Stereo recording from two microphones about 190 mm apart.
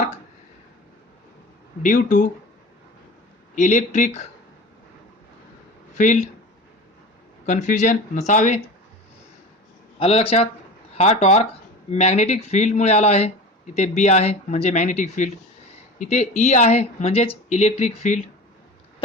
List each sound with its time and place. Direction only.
1.8 s speech: 40° left (ahead or behind)
3.5 s speech: 40° left (ahead or behind)
5.9 s speech: 40° left (ahead or behind)
7.4 s speech: 40° left (ahead or behind)
10.0 s speech: 30° left (ahead or behind)